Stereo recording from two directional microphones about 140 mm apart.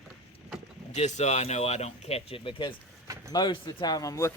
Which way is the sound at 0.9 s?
55° left (ahead or behind).